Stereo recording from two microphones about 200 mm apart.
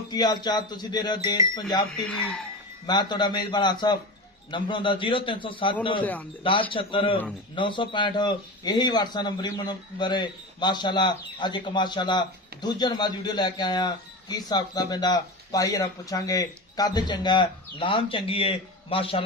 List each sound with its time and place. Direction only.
0.1 s a man's voice: 20° left (ahead or behind)
2.0 s speech: 5° left (ahead or behind)
2.8 s a man's voice: 20° left (ahead or behind)
6.0 s speech: 10° left (ahead or behind)
6.4 s a man's voice: 25° left (ahead or behind)